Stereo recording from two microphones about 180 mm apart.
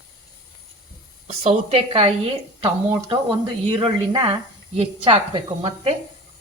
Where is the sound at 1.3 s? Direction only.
35° right (ahead or behind).